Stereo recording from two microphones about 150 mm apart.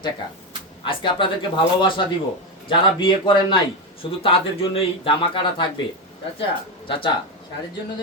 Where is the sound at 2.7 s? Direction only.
35° left (ahead or behind).